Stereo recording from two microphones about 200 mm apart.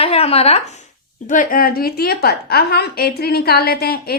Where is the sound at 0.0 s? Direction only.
30° left (ahead or behind).